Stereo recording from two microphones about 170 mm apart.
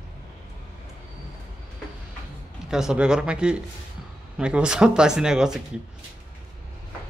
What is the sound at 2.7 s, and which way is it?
Speech, 5° right (ahead or behind).